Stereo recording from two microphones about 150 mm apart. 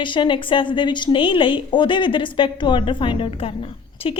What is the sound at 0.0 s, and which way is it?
Speech, 35° left (ahead or behind).